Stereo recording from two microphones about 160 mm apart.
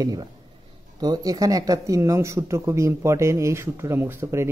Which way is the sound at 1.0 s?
25° right (ahead or behind).